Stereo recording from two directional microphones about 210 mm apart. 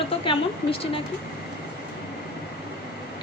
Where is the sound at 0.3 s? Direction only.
25° left (ahead or behind).